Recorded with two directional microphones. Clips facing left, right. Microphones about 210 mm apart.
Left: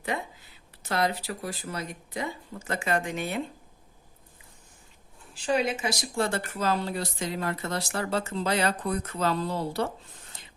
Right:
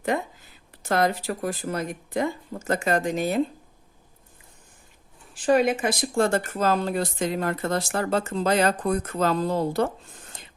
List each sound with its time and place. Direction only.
0.1 s speech: 50° right (ahead or behind)
5.4 s speech: 50° right (ahead or behind)